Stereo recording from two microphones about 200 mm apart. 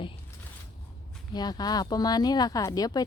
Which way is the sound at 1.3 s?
20° left (ahead or behind).